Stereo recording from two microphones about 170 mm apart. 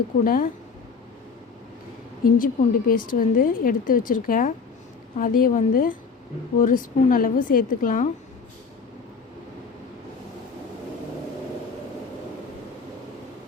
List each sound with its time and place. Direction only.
0.3 s speech: 55° left (ahead or behind)
2.4 s a woman's voice: 55° left (ahead or behind)